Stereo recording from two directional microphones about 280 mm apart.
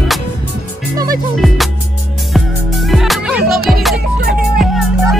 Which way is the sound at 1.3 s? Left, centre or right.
Centre.